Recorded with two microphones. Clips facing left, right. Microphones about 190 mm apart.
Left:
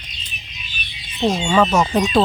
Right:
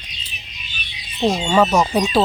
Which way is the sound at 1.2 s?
10° right (ahead or behind).